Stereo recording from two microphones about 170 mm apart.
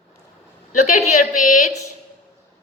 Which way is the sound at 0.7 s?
45° left (ahead or behind).